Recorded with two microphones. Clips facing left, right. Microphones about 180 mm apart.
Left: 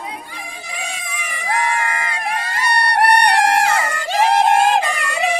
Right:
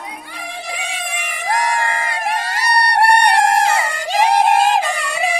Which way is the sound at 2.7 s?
30° right (ahead or behind).